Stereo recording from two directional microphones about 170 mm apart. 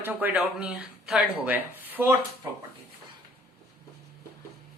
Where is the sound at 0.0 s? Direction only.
10° right (ahead or behind).